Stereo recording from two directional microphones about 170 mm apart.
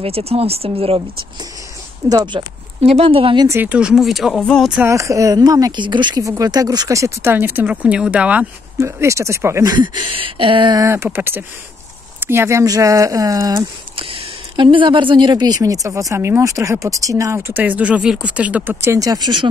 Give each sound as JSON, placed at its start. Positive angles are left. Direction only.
{"t": 0.0, "sound": "speech", "side_deg": -35}
{"t": 2.0, "sound": "speech", "side_deg": -20}
{"t": 2.8, "sound": "speech", "side_deg": -35}
{"t": 3.4, "sound": "speech", "side_deg": -10}
{"t": 4.7, "sound": "speech", "side_deg": -15}